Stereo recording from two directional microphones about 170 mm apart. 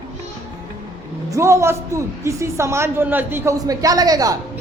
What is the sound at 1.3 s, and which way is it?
A woman's voice, 15° right (ahead or behind).